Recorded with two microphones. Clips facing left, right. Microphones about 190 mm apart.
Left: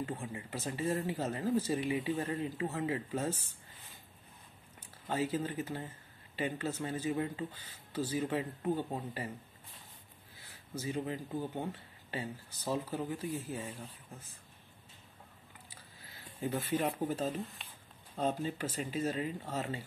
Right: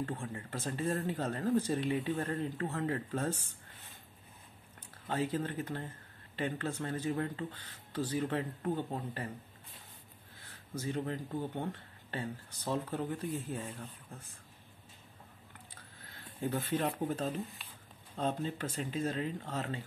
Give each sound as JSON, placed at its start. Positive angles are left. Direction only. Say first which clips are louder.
{"t": 0.0, "sound": "speech", "louder": "right 1 dB", "side_deg": 10}
{"t": 5.0, "sound": "speech", "louder": "even", "side_deg": 10}
{"t": 10.3, "sound": "speech", "louder": "right 1 dB", "side_deg": 5}
{"t": 15.7, "sound": "speech", "louder": "right 1 dB", "side_deg": 10}